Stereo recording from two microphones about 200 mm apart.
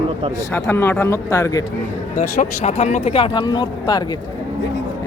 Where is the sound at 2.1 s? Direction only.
40° left (ahead or behind); by 4.0 s 20° left (ahead or behind).